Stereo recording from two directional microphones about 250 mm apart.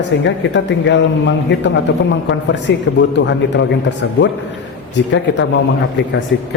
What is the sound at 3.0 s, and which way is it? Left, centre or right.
Speech, left.